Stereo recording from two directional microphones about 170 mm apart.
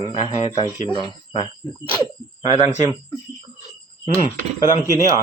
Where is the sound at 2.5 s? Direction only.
40° left (ahead or behind).